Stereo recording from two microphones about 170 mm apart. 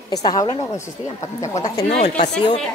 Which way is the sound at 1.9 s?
40° left (ahead or behind).